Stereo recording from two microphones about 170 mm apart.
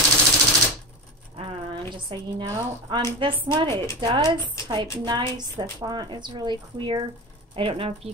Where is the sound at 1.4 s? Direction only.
35° right (ahead or behind).